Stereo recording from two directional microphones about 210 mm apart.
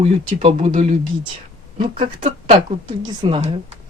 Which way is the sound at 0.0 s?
30° right (ahead or behind).